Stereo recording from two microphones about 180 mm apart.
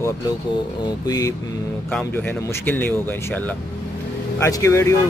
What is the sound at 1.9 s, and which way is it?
Speech, 10° left (ahead or behind).